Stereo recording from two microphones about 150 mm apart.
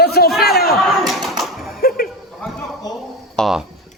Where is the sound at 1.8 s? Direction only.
80° left.